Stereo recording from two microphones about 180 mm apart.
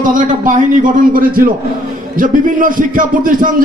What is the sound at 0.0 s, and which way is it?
A man's voice, 45° right (ahead or behind).